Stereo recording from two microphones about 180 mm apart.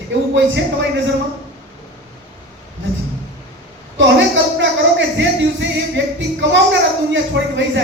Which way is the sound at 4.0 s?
90° right.